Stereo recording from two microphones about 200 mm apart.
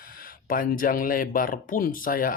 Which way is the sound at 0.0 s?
45° left (ahead or behind).